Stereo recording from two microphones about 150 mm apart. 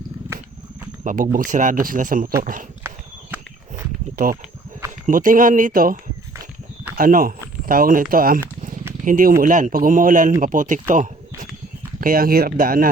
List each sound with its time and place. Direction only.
1.0 s speech: 65° right (ahead or behind)
3.3 s walk: 10° right (ahead or behind)
5.0 s speech: 60° right (ahead or behind)
6.3 s walk: 20° right (ahead or behind)
6.9 s speech: 70° right (ahead or behind)
10.9 s a sound: 55° right (ahead or behind)
11.9 s speech: 75° right (ahead or behind)